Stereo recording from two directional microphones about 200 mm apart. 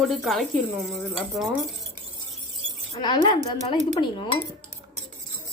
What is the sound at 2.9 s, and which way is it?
Speech, 20° left (ahead or behind).